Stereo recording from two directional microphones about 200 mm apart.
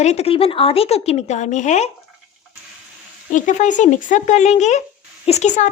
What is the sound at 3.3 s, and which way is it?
Speech, 40° left (ahead or behind).